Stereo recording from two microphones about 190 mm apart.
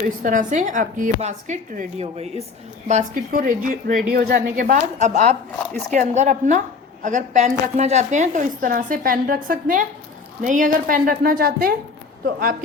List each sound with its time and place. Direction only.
0.2 s a woman's voice: 45° right (ahead or behind)